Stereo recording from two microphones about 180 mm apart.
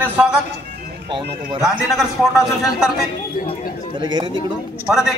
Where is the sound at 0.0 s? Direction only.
5° right (ahead or behind).